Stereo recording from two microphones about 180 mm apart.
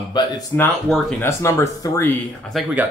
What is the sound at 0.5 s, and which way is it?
Speech, 10° left (ahead or behind).